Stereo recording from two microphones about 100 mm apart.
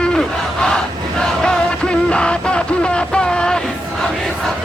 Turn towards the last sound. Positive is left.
turn(degrees=10)  # may be behind; listen again after turning